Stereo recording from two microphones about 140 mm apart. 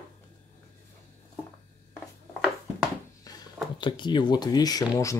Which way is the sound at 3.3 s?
25° left (ahead or behind).